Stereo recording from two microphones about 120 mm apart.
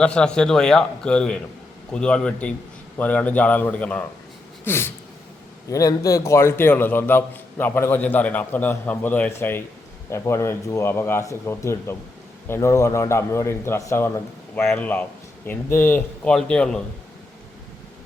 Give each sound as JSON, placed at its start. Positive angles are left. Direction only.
{"t": 0.0, "sound": "a man's voice", "side_deg": 5}
{"t": 4.6, "sound": "a sound", "side_deg": 20}
{"t": 5.7, "sound": "a man's voice", "side_deg": 30}